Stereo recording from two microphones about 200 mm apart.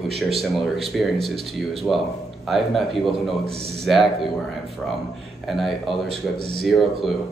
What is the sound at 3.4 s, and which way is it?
Speech, 30° right (ahead or behind).